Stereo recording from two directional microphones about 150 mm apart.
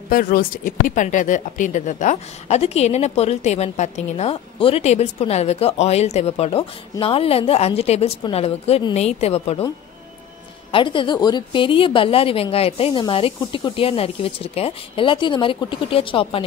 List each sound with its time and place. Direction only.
0.1 s speech: 70° left (ahead or behind); by 9.7 s 40° left (ahead or behind)
10.7 s speech: 35° left (ahead or behind)